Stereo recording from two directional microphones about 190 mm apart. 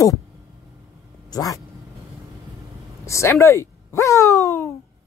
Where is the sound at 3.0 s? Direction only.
15° left (ahead or behind).